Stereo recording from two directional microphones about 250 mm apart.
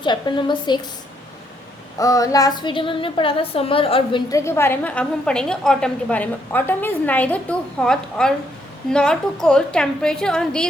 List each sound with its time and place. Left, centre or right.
0.0 s a woman's voice: centre
2.0 s a woman's voice: centre